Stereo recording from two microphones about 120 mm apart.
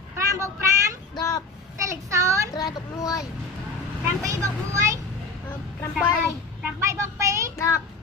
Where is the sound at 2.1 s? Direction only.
25° right (ahead or behind).